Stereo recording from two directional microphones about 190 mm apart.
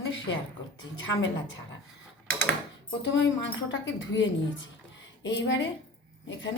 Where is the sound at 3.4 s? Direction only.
75° left (ahead or behind).